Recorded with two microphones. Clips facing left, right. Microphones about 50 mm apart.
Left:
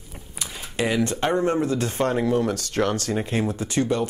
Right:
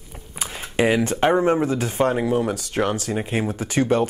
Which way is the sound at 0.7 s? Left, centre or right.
Centre.